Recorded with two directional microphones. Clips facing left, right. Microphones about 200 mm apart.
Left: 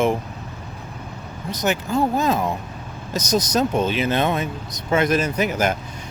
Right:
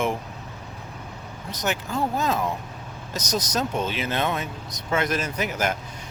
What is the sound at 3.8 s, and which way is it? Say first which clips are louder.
Speech: left 6 dB; 15° left (ahead or behind).